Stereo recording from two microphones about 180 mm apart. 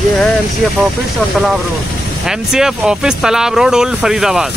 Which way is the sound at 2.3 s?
5° right (ahead or behind).